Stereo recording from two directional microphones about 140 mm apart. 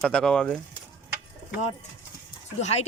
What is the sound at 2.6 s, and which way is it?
Speech, 50° left (ahead or behind).